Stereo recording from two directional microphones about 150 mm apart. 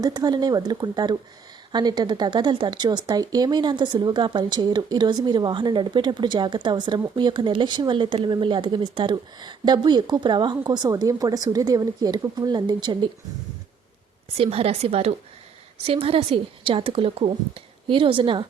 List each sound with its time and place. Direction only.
0.0 s speech: 25° right (ahead or behind)
14.3 s a woman's voice: 40° right (ahead or behind)